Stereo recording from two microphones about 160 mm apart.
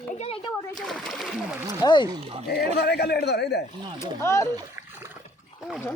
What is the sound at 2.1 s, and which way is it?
Speech, 30° right (ahead or behind).